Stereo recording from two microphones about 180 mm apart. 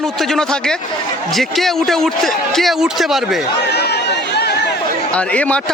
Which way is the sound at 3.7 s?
65° left (ahead or behind).